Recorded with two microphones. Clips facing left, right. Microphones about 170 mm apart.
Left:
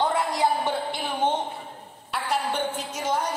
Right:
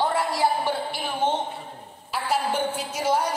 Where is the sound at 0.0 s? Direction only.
20° left (ahead or behind).